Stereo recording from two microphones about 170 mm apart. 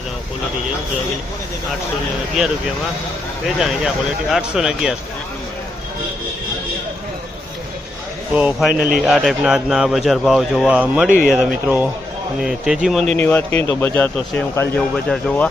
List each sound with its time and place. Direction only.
3.6 s a man's voice: 5° right (ahead or behind)
8.4 s a man's voice: 5° right (ahead or behind)